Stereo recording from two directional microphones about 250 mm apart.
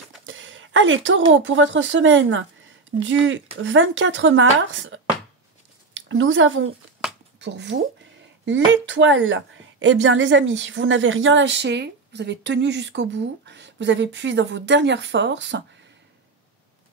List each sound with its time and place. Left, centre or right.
0.3 s a sound: right
1.3 s a woman's voice: right
8.8 s a woman's voice: right